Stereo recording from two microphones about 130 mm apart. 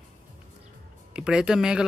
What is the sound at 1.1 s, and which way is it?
Speech, 5° right (ahead or behind).